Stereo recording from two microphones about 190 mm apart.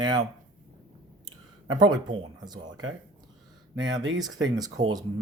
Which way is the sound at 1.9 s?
20° right (ahead or behind).